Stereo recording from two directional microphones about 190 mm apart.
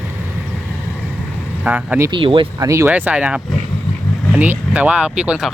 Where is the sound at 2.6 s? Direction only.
15° right (ahead or behind).